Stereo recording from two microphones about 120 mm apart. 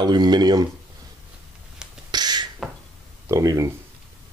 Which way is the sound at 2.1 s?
35° right (ahead or behind).